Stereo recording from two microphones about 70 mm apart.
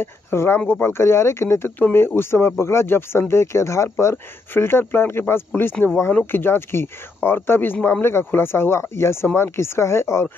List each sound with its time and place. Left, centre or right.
0.0 s speech: left